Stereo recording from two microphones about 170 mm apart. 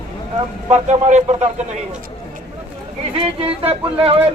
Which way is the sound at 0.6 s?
40° right (ahead or behind).